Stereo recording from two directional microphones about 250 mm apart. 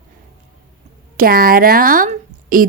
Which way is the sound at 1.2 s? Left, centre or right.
Right.